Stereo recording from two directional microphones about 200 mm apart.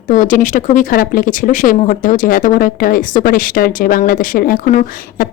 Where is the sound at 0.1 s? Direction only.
40° left (ahead or behind).